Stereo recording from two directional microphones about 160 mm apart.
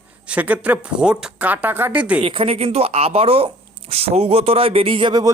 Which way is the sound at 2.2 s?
35° right (ahead or behind).